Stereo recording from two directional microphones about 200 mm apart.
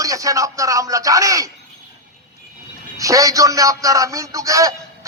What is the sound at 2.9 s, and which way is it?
A man's voice, 15° right (ahead or behind).